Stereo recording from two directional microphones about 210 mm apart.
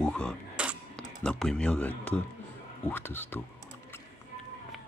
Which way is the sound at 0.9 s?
5° left (ahead or behind).